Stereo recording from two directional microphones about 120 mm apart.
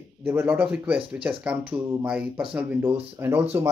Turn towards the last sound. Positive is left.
turn(degrees=-20)  # may be behind; listen again after turning